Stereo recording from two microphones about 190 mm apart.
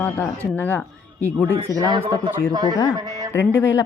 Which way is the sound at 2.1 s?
20° right (ahead or behind).